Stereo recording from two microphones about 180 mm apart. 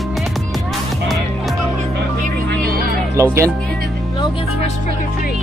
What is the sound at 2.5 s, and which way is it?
Music, 55° right (ahead or behind).